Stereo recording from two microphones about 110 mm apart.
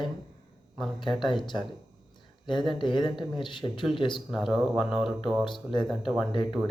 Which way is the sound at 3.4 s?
45° left (ahead or behind).